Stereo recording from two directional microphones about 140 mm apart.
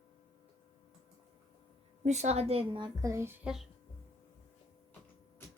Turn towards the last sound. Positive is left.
turn(degrees=-5)  # may be behind; listen again after turning